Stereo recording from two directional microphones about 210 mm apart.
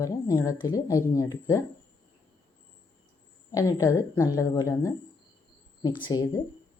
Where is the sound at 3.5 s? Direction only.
15° left (ahead or behind).